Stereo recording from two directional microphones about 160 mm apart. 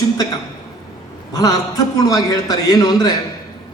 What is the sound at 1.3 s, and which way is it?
A man's voice, 25° left (ahead or behind).